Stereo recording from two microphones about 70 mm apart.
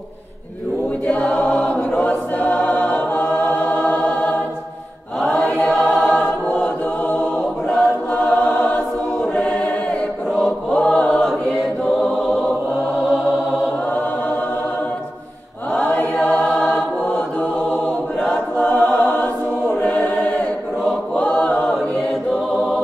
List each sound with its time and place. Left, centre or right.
1.0 s choir: centre
5.3 s chant: centre
5.9 s choir: centre
8.1 s choir: left
9.3 s choir: centre
15.9 s chant: left
16.5 s choir: centre